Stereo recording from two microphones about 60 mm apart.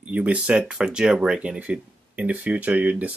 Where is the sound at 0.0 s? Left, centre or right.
Right.